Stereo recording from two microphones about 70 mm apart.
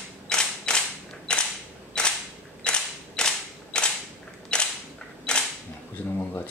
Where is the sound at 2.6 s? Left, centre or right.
Centre.